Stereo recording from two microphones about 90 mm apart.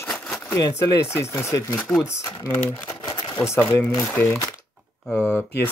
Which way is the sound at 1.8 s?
5° left (ahead or behind).